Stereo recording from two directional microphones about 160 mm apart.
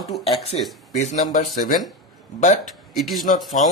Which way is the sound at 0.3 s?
40° left (ahead or behind).